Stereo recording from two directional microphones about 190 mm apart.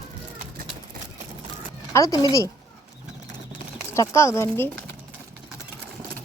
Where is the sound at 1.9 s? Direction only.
15° left (ahead or behind).